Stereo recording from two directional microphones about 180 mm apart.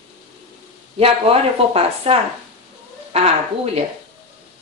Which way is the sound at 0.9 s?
35° right (ahead or behind).